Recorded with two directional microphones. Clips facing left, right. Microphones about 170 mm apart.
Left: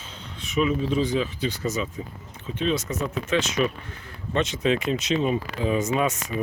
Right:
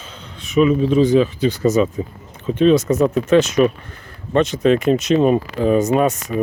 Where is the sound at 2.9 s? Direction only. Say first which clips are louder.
Right 12 dB; 60° right (ahead or behind).